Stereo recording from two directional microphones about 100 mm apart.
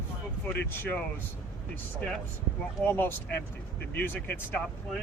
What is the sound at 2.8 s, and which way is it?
Speech, 20° left (ahead or behind).